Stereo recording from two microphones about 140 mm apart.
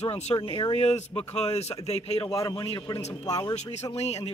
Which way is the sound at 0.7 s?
50° left (ahead or behind).